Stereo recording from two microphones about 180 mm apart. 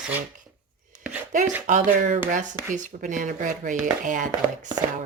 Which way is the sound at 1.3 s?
45° right (ahead or behind).